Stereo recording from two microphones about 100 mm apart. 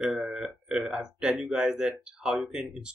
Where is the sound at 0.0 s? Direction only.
5° right (ahead or behind).